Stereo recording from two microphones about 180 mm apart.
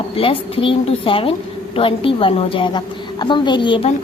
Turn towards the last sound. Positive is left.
turn(degrees=25)  # may be behind; listen again after turning